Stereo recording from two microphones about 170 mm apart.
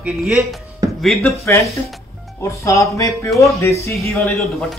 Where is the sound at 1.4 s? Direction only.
15° left (ahead or behind).